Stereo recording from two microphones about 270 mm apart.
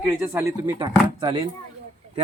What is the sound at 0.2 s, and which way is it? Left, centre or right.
A man's voice, centre.